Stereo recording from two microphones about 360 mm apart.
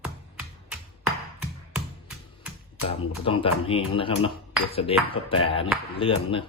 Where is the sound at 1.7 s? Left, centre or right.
Centre.